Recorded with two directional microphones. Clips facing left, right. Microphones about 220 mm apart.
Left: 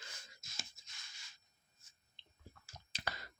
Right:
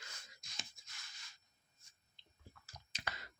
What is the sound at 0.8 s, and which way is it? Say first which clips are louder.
Writing: even; centre (ahead or behind).